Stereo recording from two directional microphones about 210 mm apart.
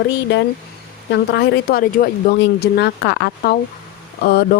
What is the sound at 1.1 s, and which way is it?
Speech, 55° left (ahead or behind).